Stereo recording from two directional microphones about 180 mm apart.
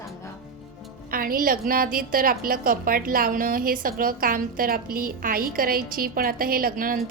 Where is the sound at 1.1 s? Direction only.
50° right (ahead or behind).